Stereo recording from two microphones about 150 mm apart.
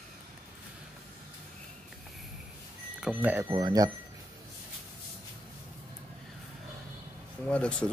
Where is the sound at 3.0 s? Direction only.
10° right (ahead or behind).